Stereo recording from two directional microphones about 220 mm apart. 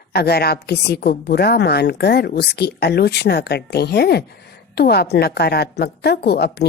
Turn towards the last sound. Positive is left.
turn(degrees=50)  # may be behind; listen again after turning